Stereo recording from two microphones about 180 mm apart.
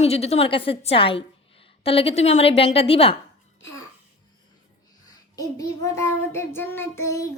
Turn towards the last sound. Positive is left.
turn(degrees=15)  # may be behind; listen again after turning